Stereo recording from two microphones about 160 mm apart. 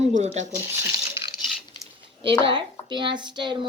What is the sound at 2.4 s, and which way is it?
Speech, 30° right (ahead or behind).